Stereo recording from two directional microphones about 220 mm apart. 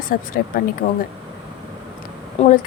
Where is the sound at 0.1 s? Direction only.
40° left (ahead or behind).